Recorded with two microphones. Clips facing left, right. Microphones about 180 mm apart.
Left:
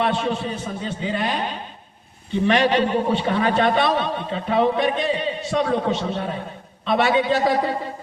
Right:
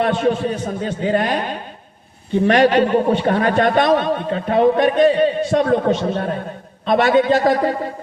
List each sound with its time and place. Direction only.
0.0 s a man's voice: 45° right (ahead or behind)